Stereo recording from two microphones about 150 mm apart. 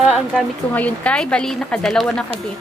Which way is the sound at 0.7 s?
10° left (ahead or behind).